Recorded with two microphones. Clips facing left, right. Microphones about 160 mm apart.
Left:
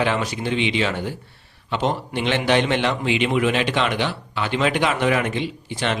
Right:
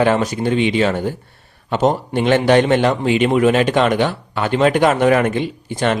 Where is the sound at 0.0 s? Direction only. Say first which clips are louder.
Right 7 dB; 45° right (ahead or behind).